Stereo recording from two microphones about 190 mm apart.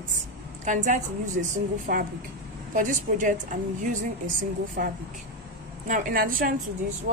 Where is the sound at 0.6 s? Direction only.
40° right (ahead or behind).